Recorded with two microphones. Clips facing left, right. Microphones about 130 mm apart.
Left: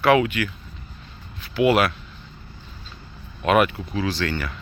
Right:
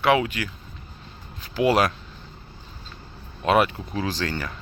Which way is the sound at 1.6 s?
35° right (ahead or behind).